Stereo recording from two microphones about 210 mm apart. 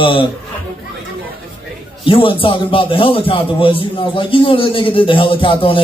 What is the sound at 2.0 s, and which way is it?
A man's voice, 25° left (ahead or behind).